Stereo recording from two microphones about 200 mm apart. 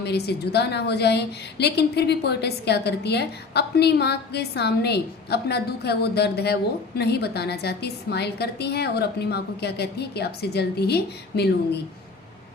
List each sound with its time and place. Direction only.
0.0 s a woman's voice: 55° left (ahead or behind)